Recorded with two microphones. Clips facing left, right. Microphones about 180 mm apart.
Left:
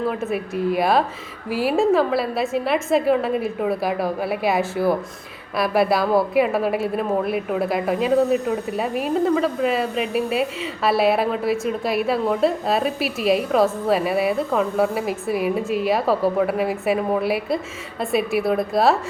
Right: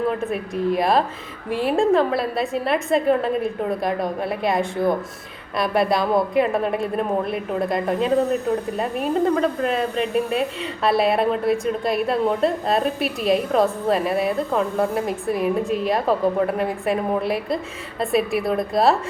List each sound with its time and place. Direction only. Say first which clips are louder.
0.1 s speech: even; 5° left (ahead or behind)